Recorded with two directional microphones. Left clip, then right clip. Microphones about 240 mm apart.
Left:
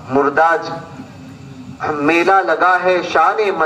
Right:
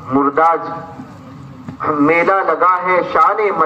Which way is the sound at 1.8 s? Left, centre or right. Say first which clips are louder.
Right 2 dB; left.